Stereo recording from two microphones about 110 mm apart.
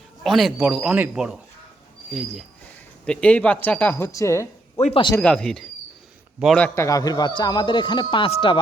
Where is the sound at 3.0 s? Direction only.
10° left (ahead or behind); by 4.8 s 25° left (ahead or behind).